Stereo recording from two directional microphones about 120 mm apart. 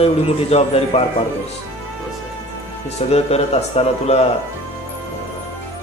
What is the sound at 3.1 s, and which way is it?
A man's voice, 60° left (ahead or behind).